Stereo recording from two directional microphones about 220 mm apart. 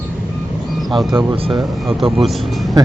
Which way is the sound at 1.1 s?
20° right (ahead or behind).